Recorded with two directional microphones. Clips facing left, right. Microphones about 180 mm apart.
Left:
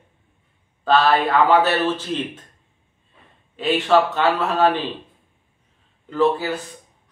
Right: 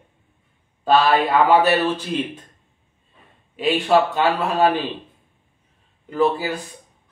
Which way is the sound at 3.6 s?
10° right (ahead or behind).